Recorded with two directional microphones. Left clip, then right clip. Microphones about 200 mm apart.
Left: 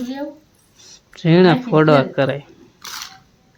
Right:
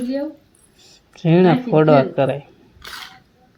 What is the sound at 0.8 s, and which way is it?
Speech, 15° left (ahead or behind).